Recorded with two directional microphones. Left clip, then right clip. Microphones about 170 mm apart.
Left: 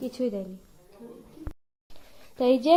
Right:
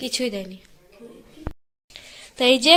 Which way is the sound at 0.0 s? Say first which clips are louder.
Right 4 dB; 5° right (ahead or behind).